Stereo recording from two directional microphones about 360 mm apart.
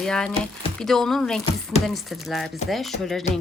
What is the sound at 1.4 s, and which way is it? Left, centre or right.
Speech, centre.